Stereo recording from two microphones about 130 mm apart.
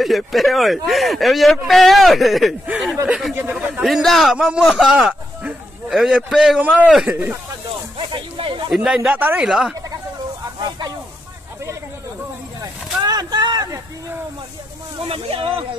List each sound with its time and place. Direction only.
0.0 s speech: centre (ahead or behind)
3.8 s speech: centre (ahead or behind); by 7.3 s 15° right (ahead or behind)
8.0 s speech: 40° right (ahead or behind)
8.6 s speech: 5° right (ahead or behind)
13.0 s a sound: 30° right (ahead or behind)
15.0 s speech: 45° right (ahead or behind)